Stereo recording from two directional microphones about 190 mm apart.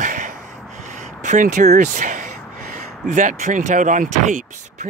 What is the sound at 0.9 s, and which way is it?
Speech, 40° right (ahead or behind).